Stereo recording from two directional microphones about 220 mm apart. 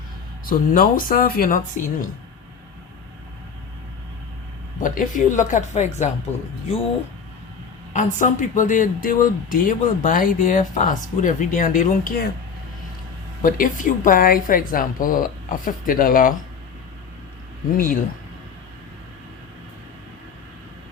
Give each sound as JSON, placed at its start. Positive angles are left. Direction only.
{"t": 0.4, "sound": "speech", "side_deg": 40}
{"t": 4.8, "sound": "speech", "side_deg": 35}
{"t": 7.9, "sound": "speech", "side_deg": 35}
{"t": 13.4, "sound": "speech", "side_deg": 40}